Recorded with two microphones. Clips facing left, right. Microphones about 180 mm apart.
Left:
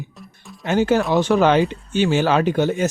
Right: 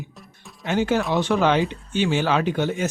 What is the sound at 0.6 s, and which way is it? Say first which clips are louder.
Speech: left 4 dB; 45° left (ahead or behind).